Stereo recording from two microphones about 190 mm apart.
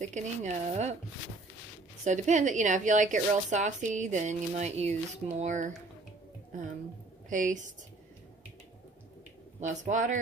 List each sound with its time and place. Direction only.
0.0 s a woman's voice: 40° right (ahead or behind)
2.0 s a woman's voice: 40° right (ahead or behind)
7.2 s a woman's voice: 45° right (ahead or behind)
9.6 s a woman's voice: 40° right (ahead or behind)